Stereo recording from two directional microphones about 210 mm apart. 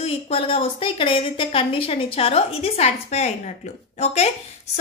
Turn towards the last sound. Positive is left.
turn(degrees=30)  # may be behind; listen again after turning